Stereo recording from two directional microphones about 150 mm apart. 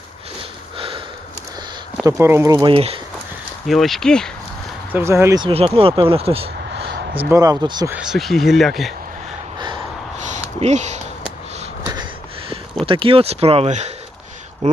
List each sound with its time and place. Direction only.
0.8 s sniff: 35° right (ahead or behind)
2.0 s speech: 20° right (ahead or behind)
2.6 s speech: 40° right (ahead or behind)
3.7 s speech: centre (ahead or behind)
4.9 s speech: 15° right (ahead or behind)
5.4 s speech: 35° right (ahead or behind)
7.2 s speech: 20° right (ahead or behind)
7.9 s speech: 5° right (ahead or behind)
9.6 s a sound: 30° right (ahead or behind)
10.6 s speech: 50° right (ahead or behind)
12.8 s speech: 35° right (ahead or behind)